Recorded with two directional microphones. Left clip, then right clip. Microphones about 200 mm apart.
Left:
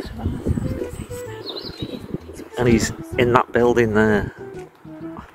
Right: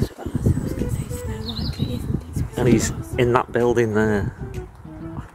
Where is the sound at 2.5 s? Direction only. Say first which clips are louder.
Left 1 dB; 5° right (ahead or behind).